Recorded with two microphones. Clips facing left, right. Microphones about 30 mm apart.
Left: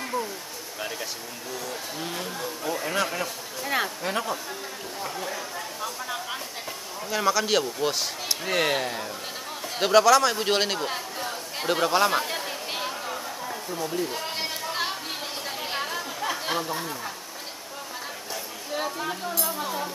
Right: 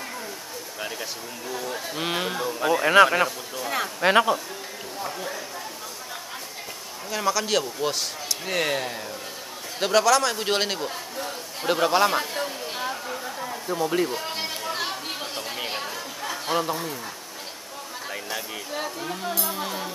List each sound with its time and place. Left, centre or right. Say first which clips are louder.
1.5 s speech: right 3 dB; right
2.0 s speech: right 8 dB; right
3.6 s speech: left 1 dB; centre
4.0 s speech: right 10 dB; right
5.0 s speech: right 1 dB; centre
7.1 s speech: left 1 dB; centre
12.7 s a sound: left 1 dB; centre
14.0 s chatter: right 2 dB; centre
18.7 s a sound: left 3 dB; centre